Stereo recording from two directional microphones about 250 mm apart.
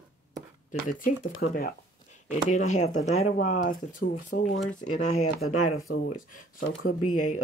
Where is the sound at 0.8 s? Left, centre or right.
Left.